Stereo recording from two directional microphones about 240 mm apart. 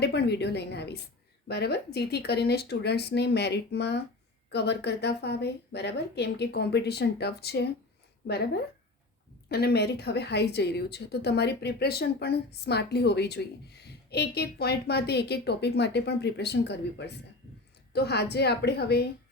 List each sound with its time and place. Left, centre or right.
0.0 s a woman's voice: left